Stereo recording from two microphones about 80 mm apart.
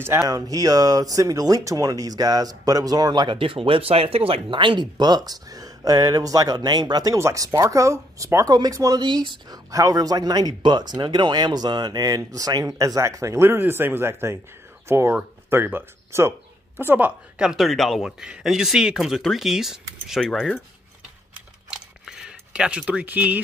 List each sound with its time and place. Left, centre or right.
0.3 s speech: right
7.2 s speech: right
8.5 s speech: right
9.0 s speech: right
9.5 s speech: right
17.4 s speech: centre
21.6 s a sound: centre